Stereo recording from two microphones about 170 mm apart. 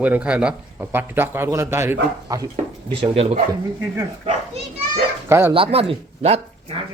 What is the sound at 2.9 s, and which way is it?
Speech, 35° right (ahead or behind).